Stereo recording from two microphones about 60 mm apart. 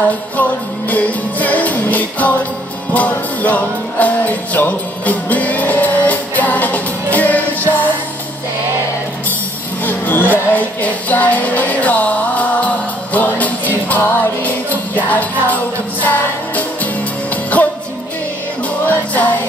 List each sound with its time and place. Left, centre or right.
0.4 s music: left
9.8 s music: left
18.9 s music: left